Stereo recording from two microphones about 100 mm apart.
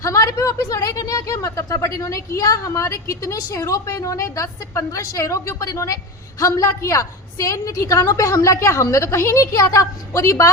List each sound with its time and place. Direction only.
0.0 s a woman's voice: 30° left (ahead or behind)